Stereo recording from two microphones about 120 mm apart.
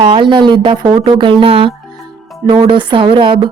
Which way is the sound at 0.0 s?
45° right (ahead or behind).